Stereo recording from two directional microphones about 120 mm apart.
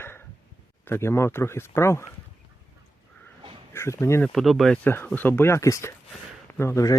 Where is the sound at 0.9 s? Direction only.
20° left (ahead or behind).